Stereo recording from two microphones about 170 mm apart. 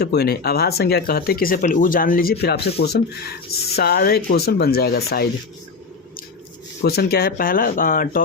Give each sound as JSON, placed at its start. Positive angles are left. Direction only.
{"t": 0.0, "sound": "speech", "side_deg": 65}
{"t": 6.8, "sound": "speech", "side_deg": 65}